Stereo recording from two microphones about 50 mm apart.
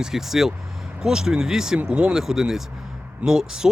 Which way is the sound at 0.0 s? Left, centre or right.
Centre.